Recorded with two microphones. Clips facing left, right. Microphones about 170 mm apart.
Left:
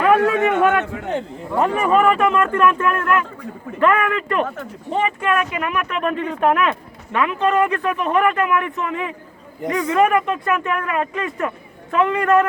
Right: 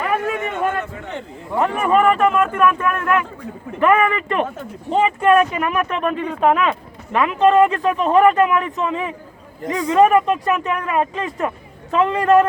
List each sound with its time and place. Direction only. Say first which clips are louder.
0.0 s a man's voice: left 6 dB; 75° left (ahead or behind)
1.7 s speech: right 1 dB; centre (ahead or behind); by 6.0 s 30° right (ahead or behind)
6.2 s speech: right 1 dB; centre (ahead or behind)
7.1 s a man's voice: right 4 dB; 30° right (ahead or behind)